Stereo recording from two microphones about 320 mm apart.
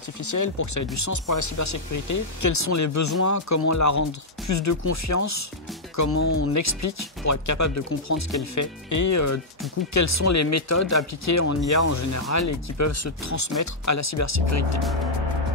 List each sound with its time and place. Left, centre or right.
0.2 s speech: left